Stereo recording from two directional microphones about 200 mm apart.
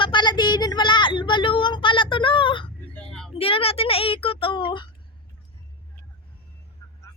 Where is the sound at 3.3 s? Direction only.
30° left (ahead or behind).